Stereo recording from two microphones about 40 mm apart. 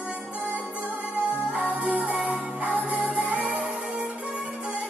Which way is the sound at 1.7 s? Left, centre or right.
Right.